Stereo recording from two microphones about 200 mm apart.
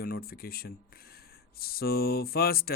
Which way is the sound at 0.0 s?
50° left (ahead or behind).